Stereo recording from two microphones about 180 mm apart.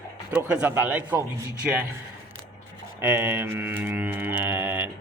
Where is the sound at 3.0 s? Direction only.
10° right (ahead or behind).